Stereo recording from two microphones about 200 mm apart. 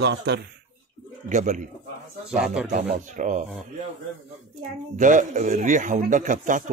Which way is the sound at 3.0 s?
40° right (ahead or behind).